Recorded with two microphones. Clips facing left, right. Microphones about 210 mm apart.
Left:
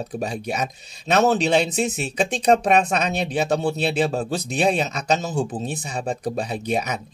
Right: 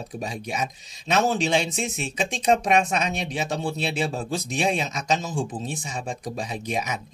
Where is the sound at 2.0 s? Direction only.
40° left (ahead or behind).